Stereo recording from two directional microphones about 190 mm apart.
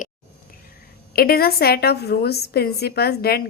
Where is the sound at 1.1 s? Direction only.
55° left (ahead or behind).